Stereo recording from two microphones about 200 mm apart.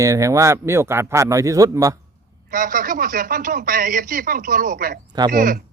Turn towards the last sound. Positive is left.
turn(degrees=-45)  # may be behind; listen again after turning